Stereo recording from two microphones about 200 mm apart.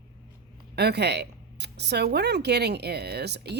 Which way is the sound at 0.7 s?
55° right (ahead or behind).